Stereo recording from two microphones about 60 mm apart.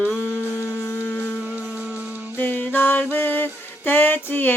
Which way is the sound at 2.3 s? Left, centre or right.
Left.